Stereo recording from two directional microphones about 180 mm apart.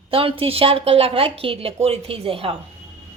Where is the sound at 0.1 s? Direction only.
30° right (ahead or behind).